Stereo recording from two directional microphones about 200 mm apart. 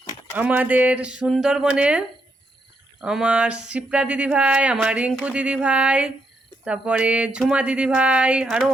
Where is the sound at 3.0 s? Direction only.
5° right (ahead or behind).